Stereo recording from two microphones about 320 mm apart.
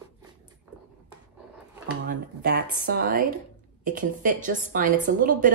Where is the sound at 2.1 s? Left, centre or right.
Right.